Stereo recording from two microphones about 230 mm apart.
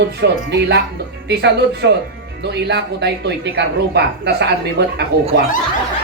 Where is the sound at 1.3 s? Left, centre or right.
Right.